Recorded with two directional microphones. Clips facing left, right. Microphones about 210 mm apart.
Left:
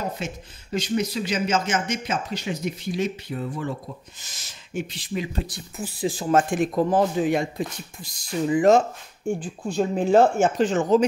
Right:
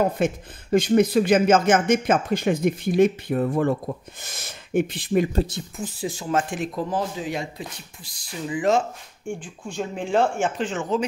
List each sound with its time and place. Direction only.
0.0 s speech: 55° right (ahead or behind)
5.8 s speech: 10° left (ahead or behind)
6.0 s a man's voice: 35° left (ahead or behind)